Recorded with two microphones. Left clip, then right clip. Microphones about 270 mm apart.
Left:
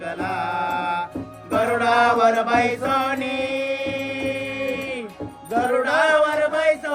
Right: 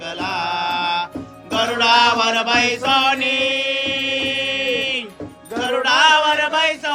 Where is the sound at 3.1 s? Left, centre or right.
Left.